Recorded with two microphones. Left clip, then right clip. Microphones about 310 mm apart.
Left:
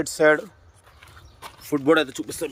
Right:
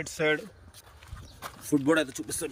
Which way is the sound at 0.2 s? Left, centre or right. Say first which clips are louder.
Left 9 dB; left.